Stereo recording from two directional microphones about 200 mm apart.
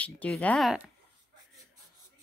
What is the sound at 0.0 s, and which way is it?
Speech, 5° left (ahead or behind).